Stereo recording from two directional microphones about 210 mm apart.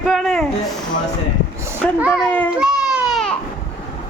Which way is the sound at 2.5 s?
5° right (ahead or behind).